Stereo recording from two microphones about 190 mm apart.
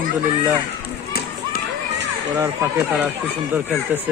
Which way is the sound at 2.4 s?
15° right (ahead or behind).